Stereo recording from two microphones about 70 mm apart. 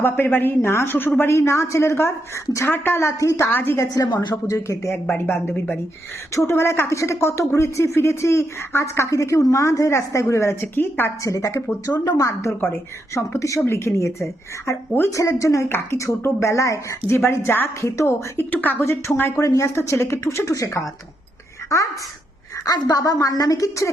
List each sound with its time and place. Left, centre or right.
0.0 s speech: left
3.4 s speech: left
3.8 s a woman's voice: left
4.4 s speech: left
5.0 s speech: left
6.3 s speech: left
11.2 s speech: left
17.1 s speech: left
17.8 s speech: left
18.5 s speech: left
18.8 s speech: left
19.4 s speech: left
22.6 s a woman's voice: left